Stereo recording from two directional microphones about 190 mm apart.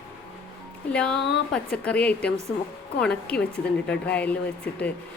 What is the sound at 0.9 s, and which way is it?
A woman's voice, 5° left (ahead or behind).